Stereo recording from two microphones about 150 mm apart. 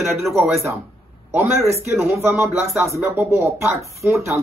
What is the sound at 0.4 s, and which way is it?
A man's voice, 20° right (ahead or behind).